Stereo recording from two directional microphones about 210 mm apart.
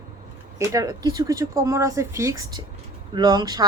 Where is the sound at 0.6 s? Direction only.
15° right (ahead or behind).